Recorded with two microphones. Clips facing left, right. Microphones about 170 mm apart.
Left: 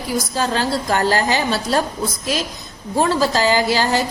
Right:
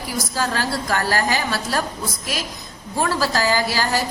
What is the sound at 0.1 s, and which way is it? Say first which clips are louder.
A woman's voice: left 4 dB; 25° left (ahead or behind).